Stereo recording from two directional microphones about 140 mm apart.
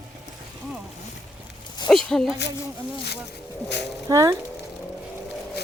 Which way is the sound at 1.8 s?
5° left (ahead or behind).